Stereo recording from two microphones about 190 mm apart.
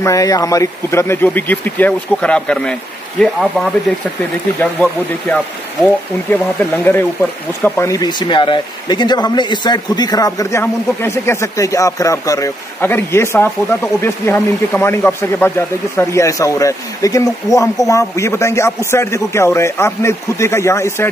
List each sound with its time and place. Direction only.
0.0 s speech: 15° left (ahead or behind)
6.3 s speech: 10° left (ahead or behind)